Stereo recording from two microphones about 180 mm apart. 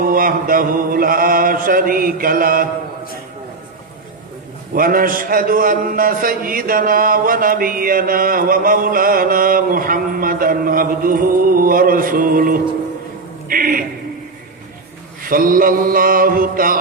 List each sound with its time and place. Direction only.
0.0 s speech: 50° right (ahead or behind)
4.7 s speech: 50° right (ahead or behind)
15.3 s speech: 50° right (ahead or behind)